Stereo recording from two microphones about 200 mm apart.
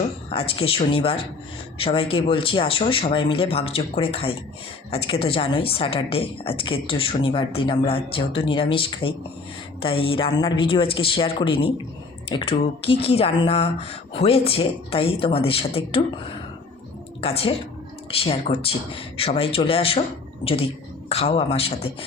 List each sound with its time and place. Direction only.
0.3 s a man's voice: 30° left (ahead or behind)